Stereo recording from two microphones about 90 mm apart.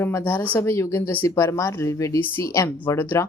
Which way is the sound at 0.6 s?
30° left (ahead or behind).